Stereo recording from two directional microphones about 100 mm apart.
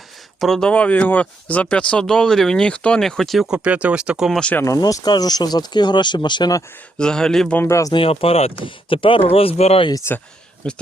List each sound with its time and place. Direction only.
0.3 s speech: centre (ahead or behind)
4.3 s speech: 10° left (ahead or behind)
4.6 s speech: 35° left (ahead or behind)
7.0 s speech: 5° left (ahead or behind)
7.6 s speech: 30° left (ahead or behind)
7.9 s speech: 70° left (ahead or behind)
8.6 s speech: 60° left (ahead or behind); by 9.8 s 80° left
9.9 s speech: 30° left (ahead or behind)
10.6 s speech: 10° left (ahead or behind)